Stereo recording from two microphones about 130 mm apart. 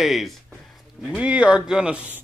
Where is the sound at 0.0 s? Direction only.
Centre (ahead or behind).